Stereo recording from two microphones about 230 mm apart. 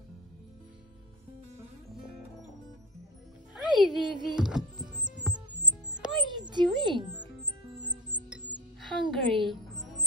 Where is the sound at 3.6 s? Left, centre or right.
Centre.